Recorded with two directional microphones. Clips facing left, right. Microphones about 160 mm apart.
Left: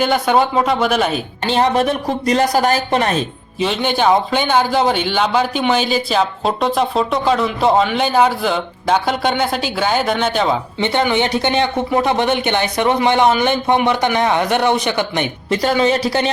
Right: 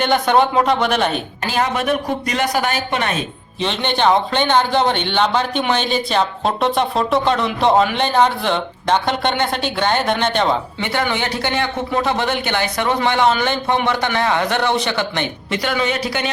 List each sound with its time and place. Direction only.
0.0 s a man's voice: 5° left (ahead or behind)
1.5 s speech: 30° left (ahead or behind)
3.6 s a man's voice: 5° left (ahead or behind)
10.8 s speech: 20° left (ahead or behind)
15.4 s speech: 35° left (ahead or behind)